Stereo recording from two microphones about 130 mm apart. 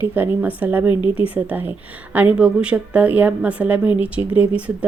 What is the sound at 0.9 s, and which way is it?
Speech, 35° left (ahead or behind).